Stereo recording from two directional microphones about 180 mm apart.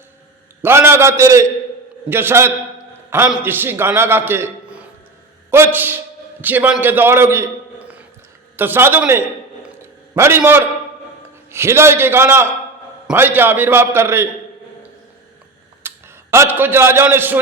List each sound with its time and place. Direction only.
0.6 s a man's voice: 15° right (ahead or behind)
8.5 s a man's voice: 10° right (ahead or behind)
15.8 s tick: 10° right (ahead or behind)
16.3 s a man's voice: 15° right (ahead or behind)